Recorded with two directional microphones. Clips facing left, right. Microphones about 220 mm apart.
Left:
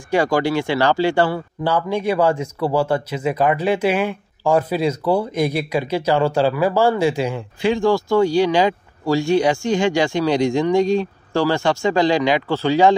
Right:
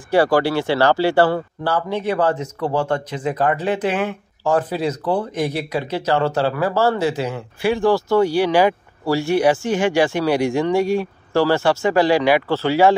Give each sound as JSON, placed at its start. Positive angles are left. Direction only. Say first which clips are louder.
{"t": 0.1, "sound": "speech", "louder": "right 2 dB", "side_deg": 15}